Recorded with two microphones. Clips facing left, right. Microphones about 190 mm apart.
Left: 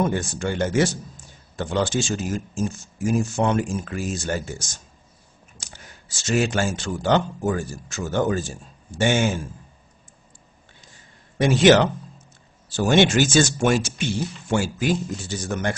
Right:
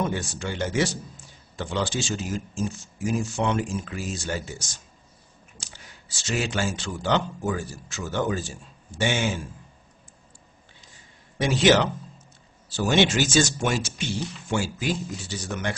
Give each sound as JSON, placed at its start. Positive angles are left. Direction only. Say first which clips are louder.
{"t": 0.1, "sound": "speech", "louder": "left 5 dB", "side_deg": 50}
{"t": 11.3, "sound": "speech", "louder": "left 4 dB", "side_deg": 50}